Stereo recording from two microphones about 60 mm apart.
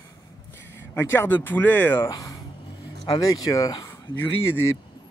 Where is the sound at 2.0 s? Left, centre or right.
Left.